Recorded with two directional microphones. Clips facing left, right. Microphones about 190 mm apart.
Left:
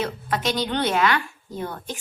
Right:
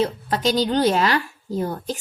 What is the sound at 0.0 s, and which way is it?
A woman's voice, 30° right (ahead or behind).